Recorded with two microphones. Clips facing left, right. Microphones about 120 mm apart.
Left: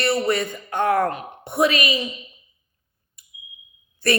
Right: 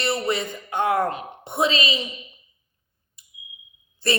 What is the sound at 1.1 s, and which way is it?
Speech, 20° right (ahead or behind).